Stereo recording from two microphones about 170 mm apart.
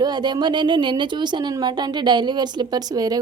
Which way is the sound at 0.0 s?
25° right (ahead or behind).